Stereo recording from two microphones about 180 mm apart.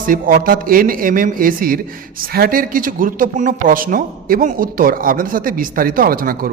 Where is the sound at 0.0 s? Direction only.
50° right (ahead or behind).